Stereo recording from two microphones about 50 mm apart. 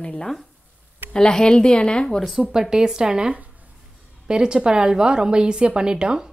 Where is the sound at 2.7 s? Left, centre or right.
Centre.